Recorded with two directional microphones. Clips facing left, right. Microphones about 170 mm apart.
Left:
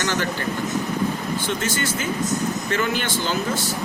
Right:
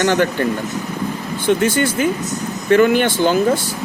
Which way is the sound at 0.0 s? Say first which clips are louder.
Right 9 dB; 55° right (ahead or behind).